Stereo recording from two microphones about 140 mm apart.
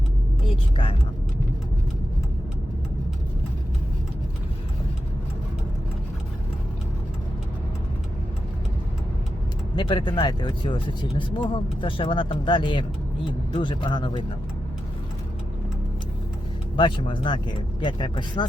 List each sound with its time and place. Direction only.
0.4 s speech: 40° left (ahead or behind)
9.7 s speech: 35° left (ahead or behind)
16.7 s speech: 35° left (ahead or behind)